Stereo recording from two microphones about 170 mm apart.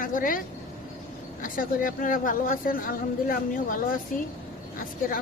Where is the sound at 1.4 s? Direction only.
55° left (ahead or behind).